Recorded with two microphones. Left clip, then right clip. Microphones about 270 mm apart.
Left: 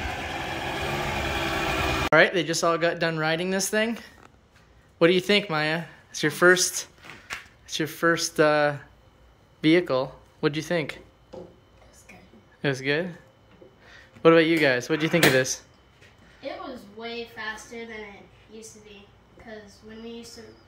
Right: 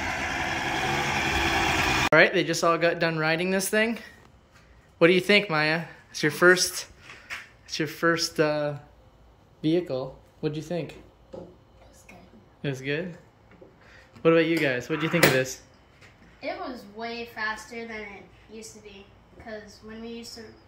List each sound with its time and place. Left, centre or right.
0.0 s vehicle: centre
2.1 s speech: centre
12.6 s speech: centre